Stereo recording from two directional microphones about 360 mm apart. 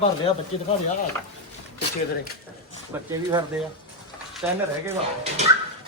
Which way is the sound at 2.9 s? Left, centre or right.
Centre.